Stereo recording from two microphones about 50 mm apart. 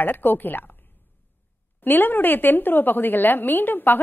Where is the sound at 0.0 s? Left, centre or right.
Left.